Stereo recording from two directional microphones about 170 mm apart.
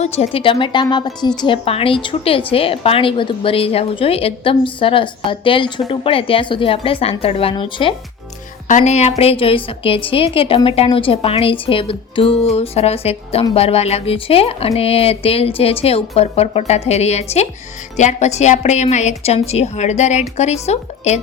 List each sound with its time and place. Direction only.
0.0 s a woman's voice: 35° left (ahead or behind)
8.6 s a woman's voice: 45° left (ahead or behind)